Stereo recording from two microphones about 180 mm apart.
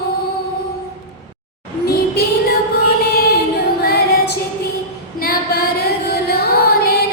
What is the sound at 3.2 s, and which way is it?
Female singing, 60° left (ahead or behind).